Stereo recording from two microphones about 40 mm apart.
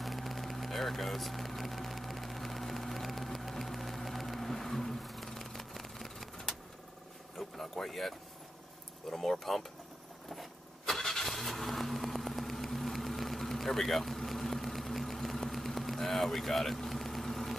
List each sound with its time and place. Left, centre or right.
0.0 s a sound: centre
9.1 s speech: centre
10.9 s vehicle: centre